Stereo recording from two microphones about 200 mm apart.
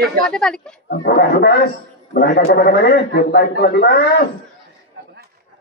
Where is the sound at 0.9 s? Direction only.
50° left (ahead or behind).